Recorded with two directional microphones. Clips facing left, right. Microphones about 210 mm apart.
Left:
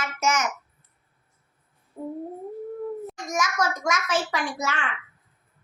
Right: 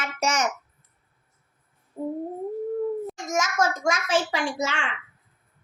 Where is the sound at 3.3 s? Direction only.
25° right (ahead or behind).